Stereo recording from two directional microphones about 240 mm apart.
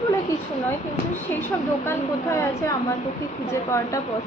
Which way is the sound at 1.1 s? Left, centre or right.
Centre.